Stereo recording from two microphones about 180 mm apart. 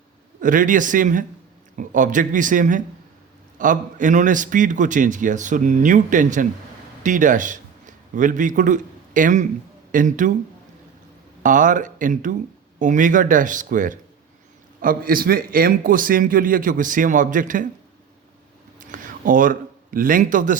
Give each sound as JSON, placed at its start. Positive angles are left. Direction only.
{"t": 0.3, "sound": "a man's voice", "side_deg": -45}
{"t": 11.4, "sound": "a man's voice", "side_deg": -45}
{"t": 18.8, "sound": "a sound", "side_deg": -45}